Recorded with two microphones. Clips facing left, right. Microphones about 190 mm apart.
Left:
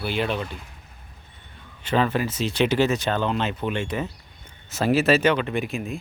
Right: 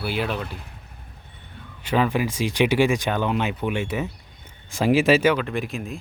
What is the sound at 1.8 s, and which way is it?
Speech, 10° right (ahead or behind).